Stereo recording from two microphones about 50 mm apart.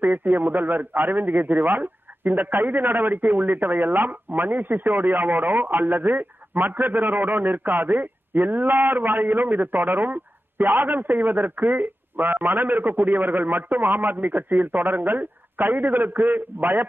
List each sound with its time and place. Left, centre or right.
0.0 s a man's voice: right